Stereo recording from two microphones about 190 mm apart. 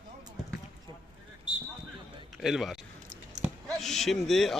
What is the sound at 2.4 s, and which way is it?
Speech, centre (ahead or behind).